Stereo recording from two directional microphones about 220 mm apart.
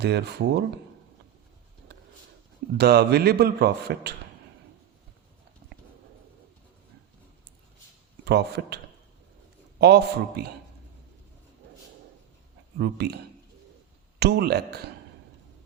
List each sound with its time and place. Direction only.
0.0 s speech: 50° right (ahead or behind)
2.7 s speech: 45° right (ahead or behind)
8.2 s speech: 50° right (ahead or behind)
9.8 s speech: 50° right (ahead or behind)
12.8 s speech: 50° right (ahead or behind)
14.2 s speech: 45° right (ahead or behind)